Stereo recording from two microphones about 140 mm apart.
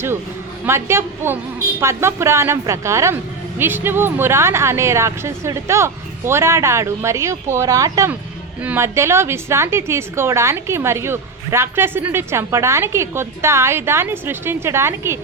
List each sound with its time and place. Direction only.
0.6 s a woman's voice: 20° right (ahead or behind)